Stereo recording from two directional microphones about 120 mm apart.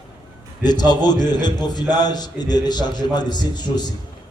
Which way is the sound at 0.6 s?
35° left (ahead or behind).